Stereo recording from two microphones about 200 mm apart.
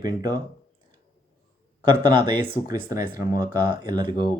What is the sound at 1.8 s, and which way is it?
Speech, 25° right (ahead or behind).